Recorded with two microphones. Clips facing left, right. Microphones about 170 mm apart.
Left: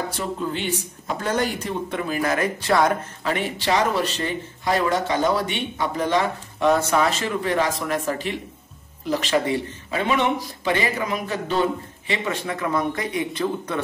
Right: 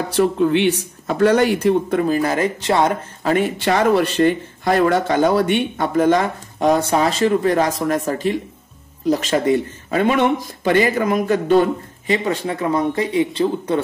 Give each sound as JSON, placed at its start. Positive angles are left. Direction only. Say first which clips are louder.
{"t": 0.1, "sound": "speech", "louder": "right 11 dB", "side_deg": -70}
{"t": 2.0, "sound": "speech", "louder": "right 5 dB", "side_deg": -35}
{"t": 3.3, "sound": "speech", "louder": "right 6 dB", "side_deg": -45}
{"t": 12.1, "sound": "speech", "louder": "right 6 dB", "side_deg": -35}